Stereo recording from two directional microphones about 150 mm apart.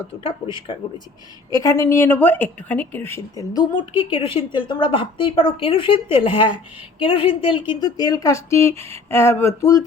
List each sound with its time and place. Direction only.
0.2 s a woman's voice: 35° left (ahead or behind)
7.8 s speech: 25° left (ahead or behind)